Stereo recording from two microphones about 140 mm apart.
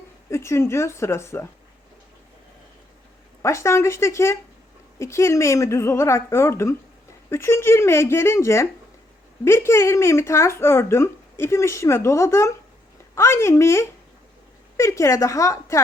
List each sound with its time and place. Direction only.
0.3 s speech: 20° left (ahead or behind)
3.4 s speech: 20° left (ahead or behind)